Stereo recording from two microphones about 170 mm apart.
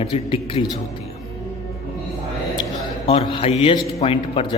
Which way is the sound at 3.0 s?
30° left (ahead or behind).